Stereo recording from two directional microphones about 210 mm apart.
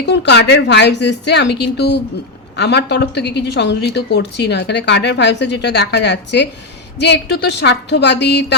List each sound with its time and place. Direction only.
0.0 s a woman's voice: 55° left (ahead or behind)